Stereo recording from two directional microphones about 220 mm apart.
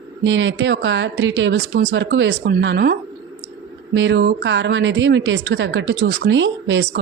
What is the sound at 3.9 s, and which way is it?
A woman's voice, 55° right (ahead or behind).